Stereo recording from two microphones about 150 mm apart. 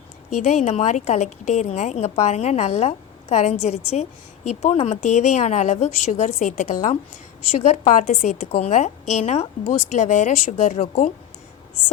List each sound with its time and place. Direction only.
0.4 s a woman's voice: 55° left (ahead or behind)